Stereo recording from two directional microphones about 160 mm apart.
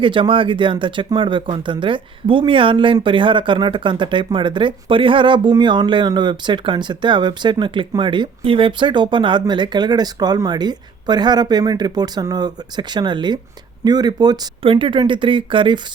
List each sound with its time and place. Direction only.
0.0 s speech: 30° right (ahead or behind)